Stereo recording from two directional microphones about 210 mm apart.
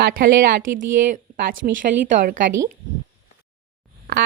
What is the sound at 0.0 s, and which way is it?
Speech, 45° right (ahead or behind).